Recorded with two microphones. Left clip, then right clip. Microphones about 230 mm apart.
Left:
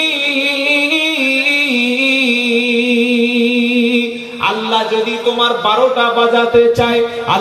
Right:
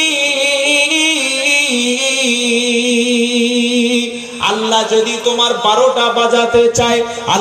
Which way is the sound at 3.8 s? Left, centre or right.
Right.